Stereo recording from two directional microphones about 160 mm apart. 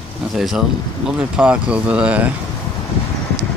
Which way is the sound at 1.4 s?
5° right (ahead or behind).